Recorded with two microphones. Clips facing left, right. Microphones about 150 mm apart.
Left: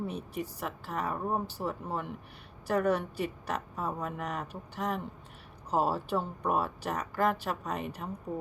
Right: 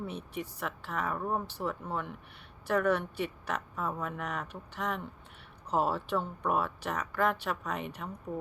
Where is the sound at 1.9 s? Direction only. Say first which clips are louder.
Left 1 dB; 5° left (ahead or behind).